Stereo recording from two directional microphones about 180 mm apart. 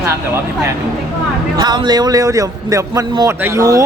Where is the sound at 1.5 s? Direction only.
25° right (ahead or behind).